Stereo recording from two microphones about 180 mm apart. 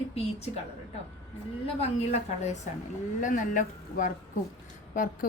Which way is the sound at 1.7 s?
35° left (ahead or behind).